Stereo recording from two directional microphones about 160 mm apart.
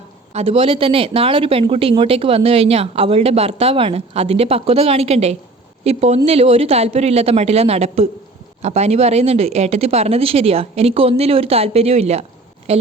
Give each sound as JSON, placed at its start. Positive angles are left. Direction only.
{"t": 0.3, "sound": "speech", "side_deg": -40}